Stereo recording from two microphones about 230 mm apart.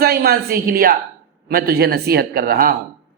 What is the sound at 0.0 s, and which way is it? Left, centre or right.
A man's voice, right.